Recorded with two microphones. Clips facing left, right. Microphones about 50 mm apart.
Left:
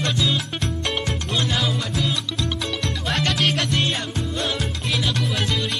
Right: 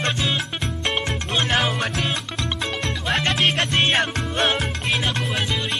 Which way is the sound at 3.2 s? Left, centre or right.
Right.